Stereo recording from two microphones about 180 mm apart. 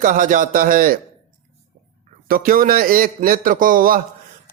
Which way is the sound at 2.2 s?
50° right (ahead or behind).